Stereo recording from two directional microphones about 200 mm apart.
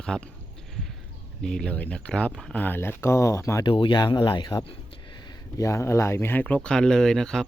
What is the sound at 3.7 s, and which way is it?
Speech, 25° left (ahead or behind).